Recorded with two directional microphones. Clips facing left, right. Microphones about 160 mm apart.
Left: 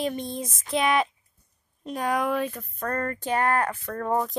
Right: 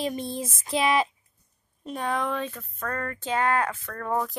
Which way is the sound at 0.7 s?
Centre (ahead or behind).